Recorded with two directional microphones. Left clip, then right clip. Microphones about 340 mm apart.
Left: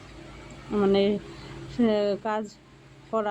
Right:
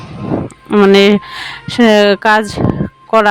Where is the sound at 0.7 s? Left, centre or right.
Right.